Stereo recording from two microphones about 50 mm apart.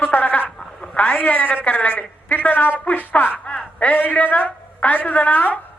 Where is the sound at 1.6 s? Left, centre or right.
Left.